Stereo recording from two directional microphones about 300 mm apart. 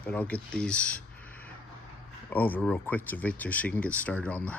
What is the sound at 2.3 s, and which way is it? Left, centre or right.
Speech, centre.